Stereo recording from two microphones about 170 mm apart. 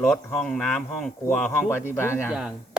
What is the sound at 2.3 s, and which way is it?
Speech, 5° right (ahead or behind).